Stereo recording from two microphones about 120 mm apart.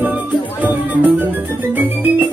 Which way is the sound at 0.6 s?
15° right (ahead or behind).